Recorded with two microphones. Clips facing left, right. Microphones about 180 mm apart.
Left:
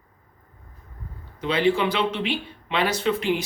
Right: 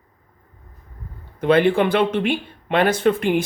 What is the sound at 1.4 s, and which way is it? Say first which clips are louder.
Speech: right 6 dB; 55° right (ahead or behind).